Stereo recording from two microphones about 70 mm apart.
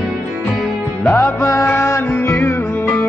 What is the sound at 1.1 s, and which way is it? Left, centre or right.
Music, left.